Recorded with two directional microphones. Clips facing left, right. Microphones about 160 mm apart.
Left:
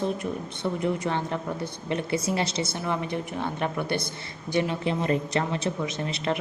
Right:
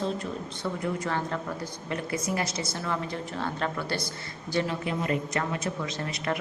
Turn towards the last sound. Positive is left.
turn(degrees=20)  # may be behind; listen again after turning